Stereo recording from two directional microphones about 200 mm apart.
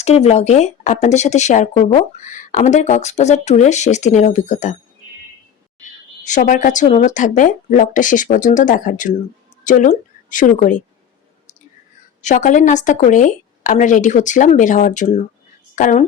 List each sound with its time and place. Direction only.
0.0 s speech: 35° left (ahead or behind)
6.2 s a woman's voice: 40° left (ahead or behind)
12.2 s speech: 40° left (ahead or behind)